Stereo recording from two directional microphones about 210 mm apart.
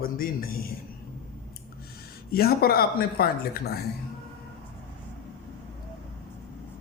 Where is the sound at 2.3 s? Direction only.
45° left (ahead or behind).